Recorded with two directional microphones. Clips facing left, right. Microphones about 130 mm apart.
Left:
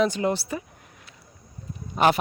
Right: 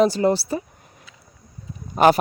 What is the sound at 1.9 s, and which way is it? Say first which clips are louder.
Speech: right 5 dB; 45° right (ahead or behind).